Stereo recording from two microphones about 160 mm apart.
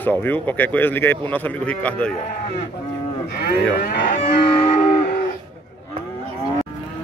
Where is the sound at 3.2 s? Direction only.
90° left.